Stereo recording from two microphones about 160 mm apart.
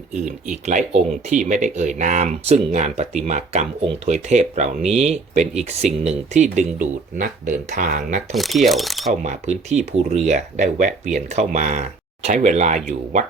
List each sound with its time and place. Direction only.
0.6 s speech: 50° right (ahead or behind)
8.3 s speech: centre (ahead or behind)
9.2 s speech: 45° right (ahead or behind)